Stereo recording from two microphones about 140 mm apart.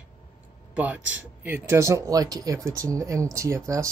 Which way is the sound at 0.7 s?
10° right (ahead or behind).